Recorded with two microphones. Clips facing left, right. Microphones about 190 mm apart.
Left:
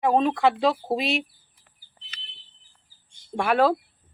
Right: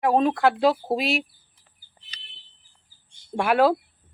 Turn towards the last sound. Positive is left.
turn(degrees=-5)  # may be behind; listen again after turning